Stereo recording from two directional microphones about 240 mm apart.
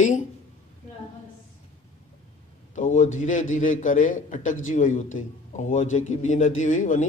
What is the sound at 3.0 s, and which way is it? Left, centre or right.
A man's voice, left.